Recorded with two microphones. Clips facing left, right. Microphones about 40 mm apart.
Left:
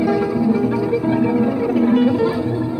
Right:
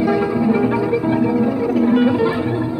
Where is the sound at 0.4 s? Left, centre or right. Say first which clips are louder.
Right 1 dB; right.